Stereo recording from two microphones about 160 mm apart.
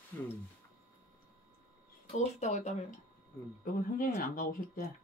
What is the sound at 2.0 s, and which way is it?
Speech, 45° left (ahead or behind).